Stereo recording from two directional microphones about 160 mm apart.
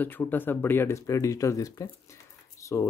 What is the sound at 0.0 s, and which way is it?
Speech, 10° left (ahead or behind).